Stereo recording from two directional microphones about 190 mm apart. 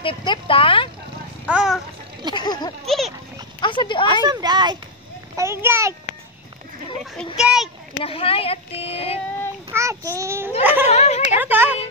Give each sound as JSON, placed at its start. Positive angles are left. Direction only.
{"t": 0.0, "sound": "speech", "side_deg": 25}
{"t": 1.4, "sound": "vehicle", "side_deg": -5}
{"t": 2.3, "sound": "a sound", "side_deg": 20}
{"t": 4.1, "sound": "a sound", "side_deg": -20}
{"t": 5.3, "sound": "a child's voice", "side_deg": -15}
{"t": 7.3, "sound": "a child's voice", "side_deg": 0}
{"t": 8.0, "sound": "speech", "side_deg": 30}
{"t": 9.7, "sound": "a child's voice", "side_deg": -15}
{"t": 10.9, "sound": "a woman's voice", "side_deg": 35}
{"t": 11.3, "sound": "a child's voice", "side_deg": -10}